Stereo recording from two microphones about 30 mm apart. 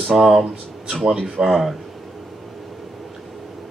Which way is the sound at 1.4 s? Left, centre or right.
Right.